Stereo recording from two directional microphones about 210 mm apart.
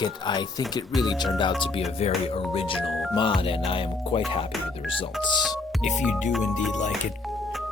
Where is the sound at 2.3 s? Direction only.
25° left (ahead or behind).